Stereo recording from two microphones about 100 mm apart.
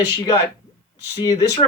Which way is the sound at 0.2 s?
35° left (ahead or behind).